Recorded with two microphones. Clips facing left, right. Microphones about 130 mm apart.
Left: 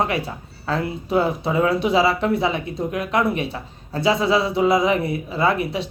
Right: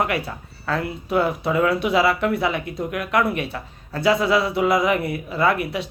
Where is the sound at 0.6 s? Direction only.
25° left (ahead or behind).